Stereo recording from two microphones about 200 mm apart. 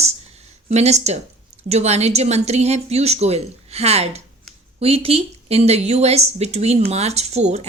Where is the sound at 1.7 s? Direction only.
30° right (ahead or behind).